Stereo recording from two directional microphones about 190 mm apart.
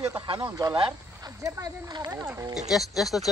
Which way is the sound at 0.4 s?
20° right (ahead or behind).